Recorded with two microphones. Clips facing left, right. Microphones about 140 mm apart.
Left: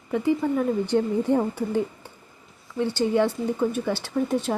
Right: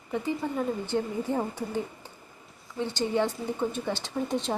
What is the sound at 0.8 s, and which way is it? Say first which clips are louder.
Speech: left 7 dB; 15° left (ahead or behind).